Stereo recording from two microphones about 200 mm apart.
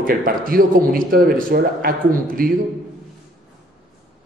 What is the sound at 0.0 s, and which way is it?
Speech, 45° right (ahead or behind).